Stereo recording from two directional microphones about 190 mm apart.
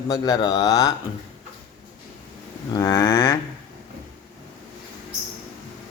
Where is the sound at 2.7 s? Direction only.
20° left (ahead or behind).